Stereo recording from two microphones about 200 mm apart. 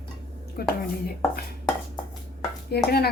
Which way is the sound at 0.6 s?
50° left (ahead or behind).